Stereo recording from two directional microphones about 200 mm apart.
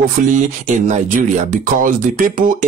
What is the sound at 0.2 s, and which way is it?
Speech, 40° right (ahead or behind).